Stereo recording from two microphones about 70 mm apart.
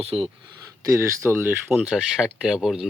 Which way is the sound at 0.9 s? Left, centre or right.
Right.